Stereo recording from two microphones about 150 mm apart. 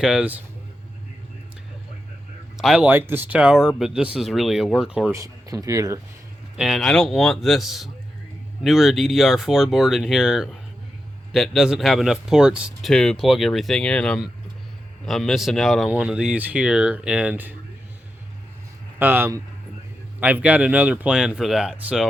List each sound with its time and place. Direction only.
0.0 s speech: 5° right (ahead or behind)
2.6 s speech: 5° right (ahead or behind)
5.1 s speech: 20° right (ahead or behind)
6.6 s speech: centre (ahead or behind)
18.9 s speech: 15° right (ahead or behind)